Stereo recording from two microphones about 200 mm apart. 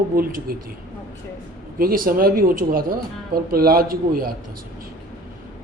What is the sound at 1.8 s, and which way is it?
Speech, 45° right (ahead or behind).